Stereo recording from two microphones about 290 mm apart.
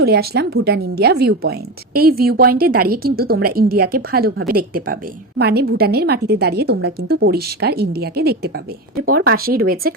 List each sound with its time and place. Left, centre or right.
0.0 s speech: right